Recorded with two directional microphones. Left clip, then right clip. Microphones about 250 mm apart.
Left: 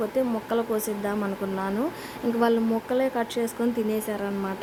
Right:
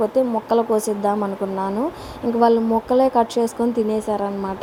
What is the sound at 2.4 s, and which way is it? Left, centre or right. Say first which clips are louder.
A woman's voice: right 8 dB; centre.